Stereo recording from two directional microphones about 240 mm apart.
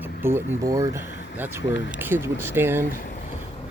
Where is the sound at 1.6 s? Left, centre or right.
Left.